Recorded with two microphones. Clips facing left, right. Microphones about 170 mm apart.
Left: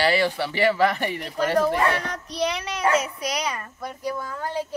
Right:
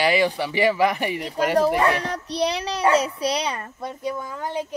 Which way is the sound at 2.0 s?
30° right (ahead or behind).